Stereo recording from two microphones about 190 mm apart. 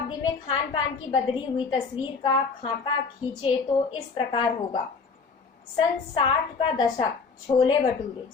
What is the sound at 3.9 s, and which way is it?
Speech, 25° left (ahead or behind).